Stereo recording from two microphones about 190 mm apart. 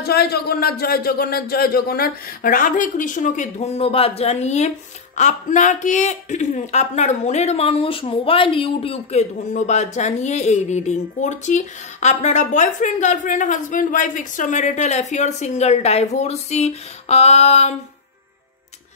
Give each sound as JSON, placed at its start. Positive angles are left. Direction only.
{"t": 0.0, "sound": "a man's voice", "side_deg": 55}